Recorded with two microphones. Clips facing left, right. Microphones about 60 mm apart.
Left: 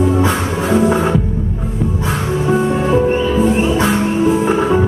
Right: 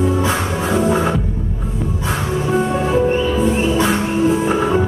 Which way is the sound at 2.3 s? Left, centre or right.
Centre.